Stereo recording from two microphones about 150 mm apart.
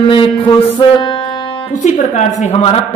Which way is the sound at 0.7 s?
35° left (ahead or behind).